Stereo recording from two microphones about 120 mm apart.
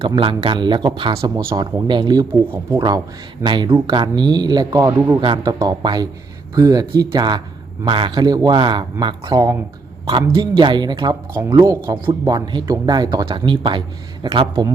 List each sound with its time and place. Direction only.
0.3 s speech: 40° right (ahead or behind); by 5.1 s 20° right (ahead or behind)
5.2 s speech: 40° right (ahead or behind)
10.2 s speech: 40° right (ahead or behind)
11.6 s a man's voice: 25° right (ahead or behind)
12.0 s a man's voice: 35° right (ahead or behind)